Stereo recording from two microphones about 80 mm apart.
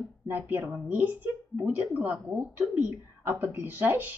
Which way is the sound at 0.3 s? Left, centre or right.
Right.